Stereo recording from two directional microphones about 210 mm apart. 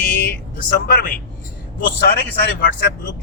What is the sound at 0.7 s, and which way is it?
A man's voice, 45° left (ahead or behind).